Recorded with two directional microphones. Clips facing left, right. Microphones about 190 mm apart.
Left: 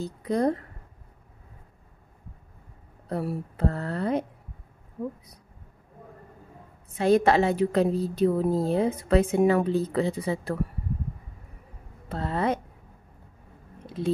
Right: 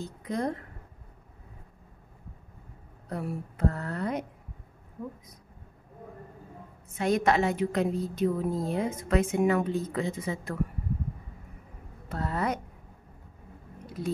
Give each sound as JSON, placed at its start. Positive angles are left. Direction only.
{"t": 0.0, "sound": "speech", "side_deg": 35}
{"t": 3.1, "sound": "a woman's voice", "side_deg": 35}
{"t": 7.0, "sound": "a woman's voice", "side_deg": 30}
{"t": 12.1, "sound": "speech", "side_deg": 25}
{"t": 13.8, "sound": "a sound", "side_deg": 25}